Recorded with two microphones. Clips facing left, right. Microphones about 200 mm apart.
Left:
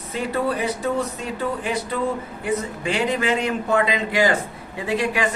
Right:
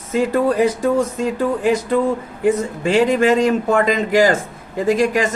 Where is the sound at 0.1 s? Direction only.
45° right (ahead or behind).